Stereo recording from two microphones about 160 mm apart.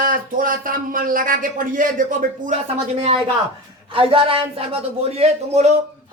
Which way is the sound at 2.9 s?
40° right (ahead or behind).